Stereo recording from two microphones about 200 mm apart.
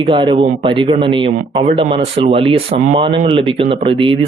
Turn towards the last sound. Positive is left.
turn(degrees=-25)  # may be behind; listen again after turning